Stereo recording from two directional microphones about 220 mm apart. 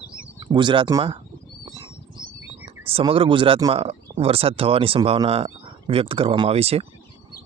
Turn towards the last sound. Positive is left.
turn(degrees=-25)  # may be behind; listen again after turning